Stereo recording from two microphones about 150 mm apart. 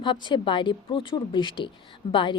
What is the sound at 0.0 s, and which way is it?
A woman's voice, 30° left (ahead or behind).